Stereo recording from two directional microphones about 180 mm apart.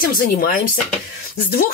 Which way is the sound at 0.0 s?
55° left (ahead or behind).